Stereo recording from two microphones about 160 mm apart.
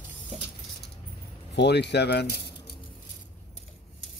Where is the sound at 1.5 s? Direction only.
90° left.